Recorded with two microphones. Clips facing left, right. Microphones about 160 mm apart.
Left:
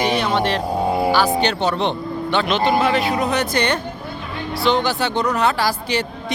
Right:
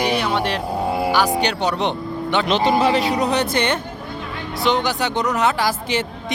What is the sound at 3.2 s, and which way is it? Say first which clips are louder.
Speech: even; 30° right (ahead or behind).